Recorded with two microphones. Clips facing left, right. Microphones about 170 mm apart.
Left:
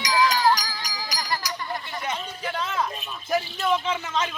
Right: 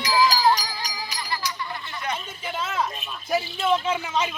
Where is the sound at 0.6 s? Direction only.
30° right (ahead or behind).